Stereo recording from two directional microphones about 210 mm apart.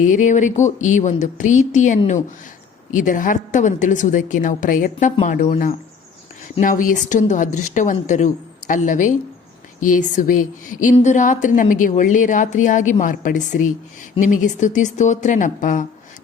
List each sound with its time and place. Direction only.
0.0 s a woman's voice: 35° left (ahead or behind)